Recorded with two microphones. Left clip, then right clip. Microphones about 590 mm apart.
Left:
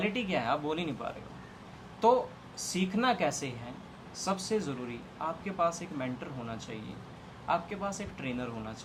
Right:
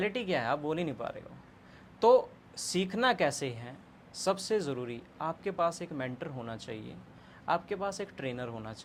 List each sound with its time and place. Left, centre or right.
0.0 s speech: right
2.6 s speech: right